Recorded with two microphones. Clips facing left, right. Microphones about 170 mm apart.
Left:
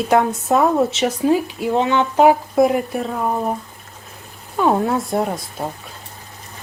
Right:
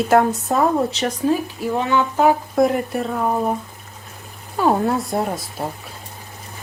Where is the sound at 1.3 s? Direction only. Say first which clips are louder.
Left 2 dB; 20° left (ahead or behind).